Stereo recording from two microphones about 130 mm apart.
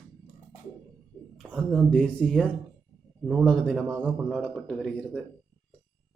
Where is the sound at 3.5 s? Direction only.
5° left (ahead or behind).